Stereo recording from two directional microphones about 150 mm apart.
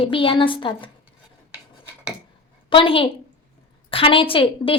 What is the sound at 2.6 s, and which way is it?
A woman's voice, 35° left (ahead or behind).